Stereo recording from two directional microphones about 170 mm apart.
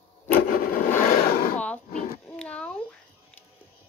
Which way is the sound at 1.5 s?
10° left (ahead or behind).